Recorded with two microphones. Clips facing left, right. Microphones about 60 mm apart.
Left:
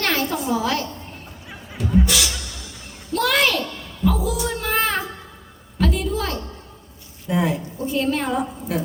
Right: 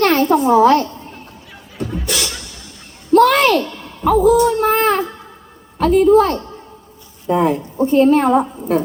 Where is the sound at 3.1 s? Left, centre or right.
Right.